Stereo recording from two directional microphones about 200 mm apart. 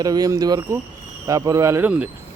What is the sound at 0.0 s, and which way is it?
Speech, 20° right (ahead or behind).